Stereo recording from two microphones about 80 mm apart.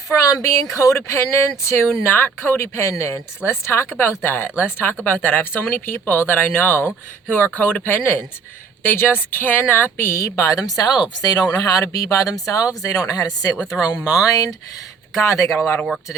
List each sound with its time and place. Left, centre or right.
0.3 s speech: left
13.7 s speech: centre
14.1 s speech: left
15.1 s speech: left